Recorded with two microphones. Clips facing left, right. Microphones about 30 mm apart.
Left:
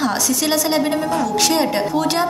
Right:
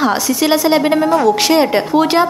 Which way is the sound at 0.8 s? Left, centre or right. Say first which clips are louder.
Right 7 dB; right.